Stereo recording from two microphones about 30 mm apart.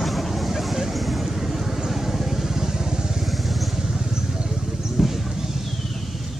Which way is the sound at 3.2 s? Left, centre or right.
Centre.